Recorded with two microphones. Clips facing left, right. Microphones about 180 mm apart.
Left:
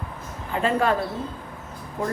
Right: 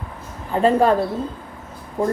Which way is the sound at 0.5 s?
35° right (ahead or behind).